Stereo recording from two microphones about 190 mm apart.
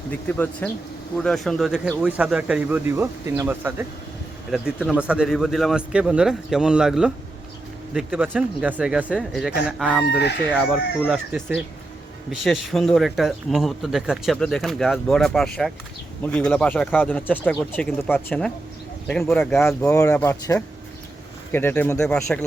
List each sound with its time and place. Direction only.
0.1 s speech: 10° left (ahead or behind)
19.9 s speech: 15° left (ahead or behind)